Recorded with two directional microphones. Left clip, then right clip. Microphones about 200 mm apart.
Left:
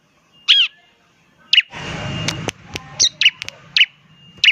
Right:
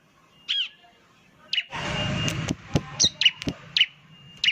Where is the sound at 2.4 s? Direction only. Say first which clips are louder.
Left 3 dB; 20° left (ahead or behind).